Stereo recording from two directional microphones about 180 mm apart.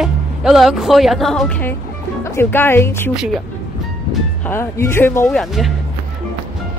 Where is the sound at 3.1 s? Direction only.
5° right (ahead or behind).